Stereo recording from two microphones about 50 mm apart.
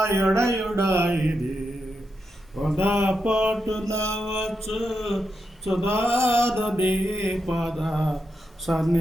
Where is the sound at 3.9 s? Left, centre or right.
Right.